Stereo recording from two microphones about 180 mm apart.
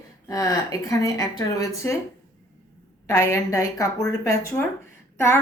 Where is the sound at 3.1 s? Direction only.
15° left (ahead or behind).